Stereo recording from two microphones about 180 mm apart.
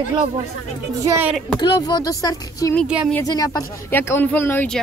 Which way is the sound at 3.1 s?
20° left (ahead or behind).